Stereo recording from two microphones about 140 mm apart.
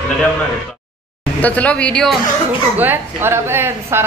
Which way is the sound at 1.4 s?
10° left (ahead or behind).